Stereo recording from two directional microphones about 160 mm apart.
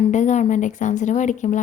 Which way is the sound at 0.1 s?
50° left (ahead or behind).